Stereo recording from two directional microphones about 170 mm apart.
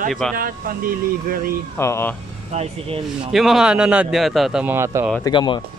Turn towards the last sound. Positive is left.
turn(degrees=25)  # may be behind; listen again after turning